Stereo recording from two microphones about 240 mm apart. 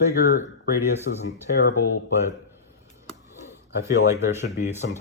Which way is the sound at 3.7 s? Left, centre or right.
Left.